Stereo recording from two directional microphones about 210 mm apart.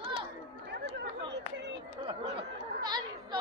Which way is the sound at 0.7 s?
55° right (ahead or behind).